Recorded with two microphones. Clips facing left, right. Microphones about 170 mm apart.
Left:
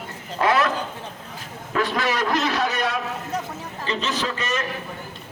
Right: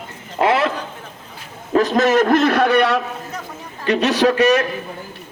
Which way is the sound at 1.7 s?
40° right (ahead or behind).